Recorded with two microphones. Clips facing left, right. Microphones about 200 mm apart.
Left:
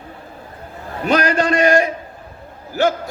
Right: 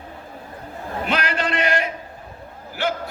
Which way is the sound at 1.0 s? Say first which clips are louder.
Left 8 dB; 45° left (ahead or behind).